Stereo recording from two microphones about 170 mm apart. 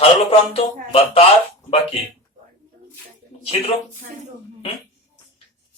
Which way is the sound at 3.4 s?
35° left (ahead or behind).